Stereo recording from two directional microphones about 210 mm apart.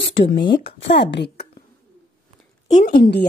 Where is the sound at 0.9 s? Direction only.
55° left (ahead or behind).